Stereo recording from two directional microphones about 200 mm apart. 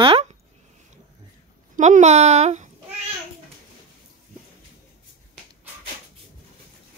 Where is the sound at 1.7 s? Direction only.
35° right (ahead or behind).